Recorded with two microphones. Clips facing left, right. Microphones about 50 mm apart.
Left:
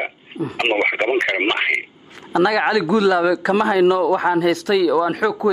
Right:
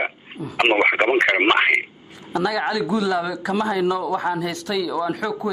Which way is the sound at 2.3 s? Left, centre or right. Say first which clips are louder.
Left 5 dB; left.